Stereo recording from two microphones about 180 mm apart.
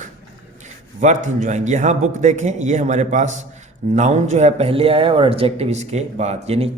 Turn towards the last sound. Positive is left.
turn(degrees=-35)  # may be behind; listen again after turning